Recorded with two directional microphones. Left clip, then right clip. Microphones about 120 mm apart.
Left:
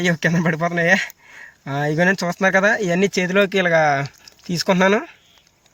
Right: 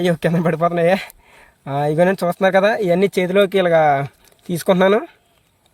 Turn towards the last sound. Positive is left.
turn(degrees=-35)  # may be behind; listen again after turning